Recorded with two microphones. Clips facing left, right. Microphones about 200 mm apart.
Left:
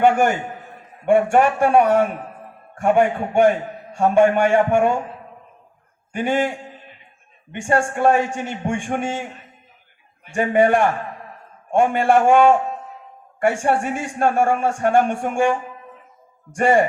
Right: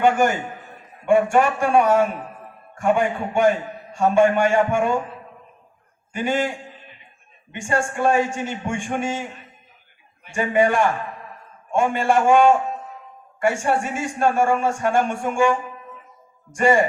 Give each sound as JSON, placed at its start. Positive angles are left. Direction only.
{"t": 0.0, "sound": "a man's voice", "side_deg": 60}
{"t": 6.1, "sound": "a man's voice", "side_deg": 60}
{"t": 7.5, "sound": "a man's voice", "side_deg": 60}
{"t": 10.2, "sound": "a man's voice", "side_deg": 55}